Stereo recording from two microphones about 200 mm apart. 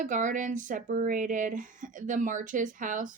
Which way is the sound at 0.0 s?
40° right (ahead or behind).